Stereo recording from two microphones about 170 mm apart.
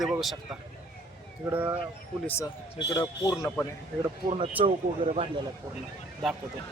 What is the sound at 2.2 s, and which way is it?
A man's voice, 15° left (ahead or behind).